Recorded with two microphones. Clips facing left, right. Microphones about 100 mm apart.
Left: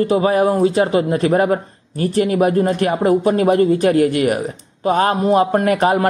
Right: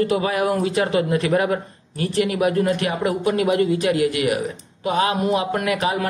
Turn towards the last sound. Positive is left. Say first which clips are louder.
# left 7 dB
turn(degrees=45)  # may be behind; listen again after turning